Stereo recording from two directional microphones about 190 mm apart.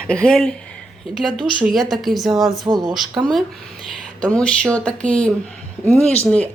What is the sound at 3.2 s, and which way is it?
A woman's voice, centre (ahead or behind).